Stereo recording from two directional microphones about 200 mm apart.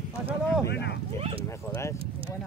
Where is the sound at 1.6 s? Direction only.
10° left (ahead or behind).